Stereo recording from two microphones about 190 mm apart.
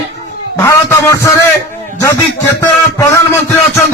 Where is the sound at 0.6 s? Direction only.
15° left (ahead or behind).